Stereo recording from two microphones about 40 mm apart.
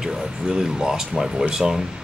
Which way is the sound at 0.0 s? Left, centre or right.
Centre.